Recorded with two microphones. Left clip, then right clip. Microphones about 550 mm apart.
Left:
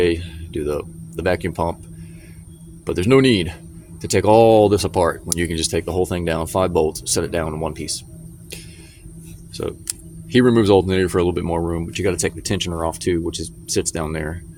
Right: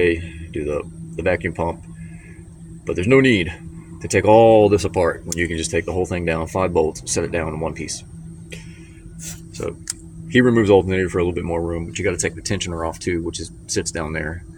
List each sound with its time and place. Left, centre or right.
0.0 s speech: left
2.8 s speech: left
9.6 s speech: left